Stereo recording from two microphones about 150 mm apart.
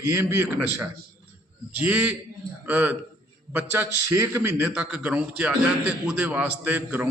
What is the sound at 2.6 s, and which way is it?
Speech, 15° right (ahead or behind).